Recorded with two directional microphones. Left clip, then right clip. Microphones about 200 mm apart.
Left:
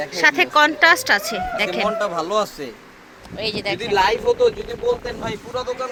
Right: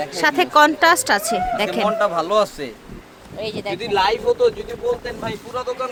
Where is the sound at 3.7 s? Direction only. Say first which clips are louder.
Even; 25° right (ahead or behind).